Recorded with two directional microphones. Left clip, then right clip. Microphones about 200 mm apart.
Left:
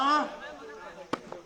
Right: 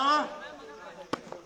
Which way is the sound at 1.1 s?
5° right (ahead or behind).